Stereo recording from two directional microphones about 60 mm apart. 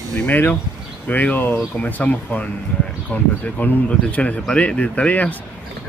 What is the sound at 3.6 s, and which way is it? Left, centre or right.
Speech, left.